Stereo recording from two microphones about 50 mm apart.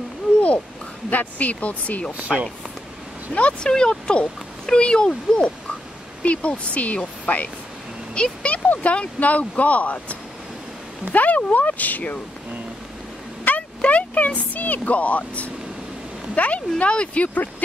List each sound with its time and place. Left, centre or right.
1.1 s speech: left
2.1 s speech: right
3.3 s speech: left
11.1 s speech: left
13.4 s vehicle: left
13.8 s speech: left